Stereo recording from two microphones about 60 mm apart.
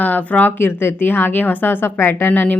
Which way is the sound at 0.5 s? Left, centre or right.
Left.